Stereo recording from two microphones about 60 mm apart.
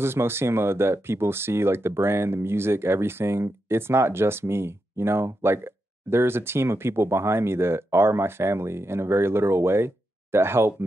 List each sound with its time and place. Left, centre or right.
0.0 s speech: right